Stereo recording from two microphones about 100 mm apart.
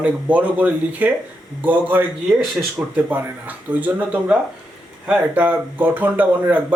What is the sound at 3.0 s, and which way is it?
Speech, 15° right (ahead or behind).